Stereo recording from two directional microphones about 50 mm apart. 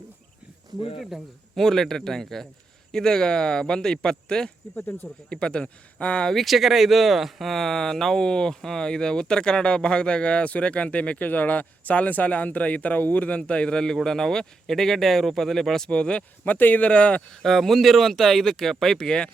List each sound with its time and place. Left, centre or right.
1.1 s a man's voice: centre
1.5 s speech: centre
4.7 s speech: left
5.0 s speech: centre
6.2 s speech: centre
15.9 s speech: centre
16.4 s speech: left
16.9 s speech: left
17.4 s speech: centre